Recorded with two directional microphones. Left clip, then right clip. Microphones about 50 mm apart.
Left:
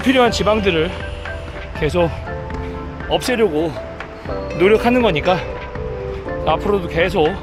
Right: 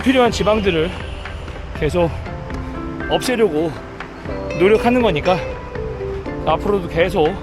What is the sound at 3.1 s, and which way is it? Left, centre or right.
Speech, centre.